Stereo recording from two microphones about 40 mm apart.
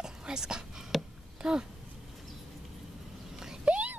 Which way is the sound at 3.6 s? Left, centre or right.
Right.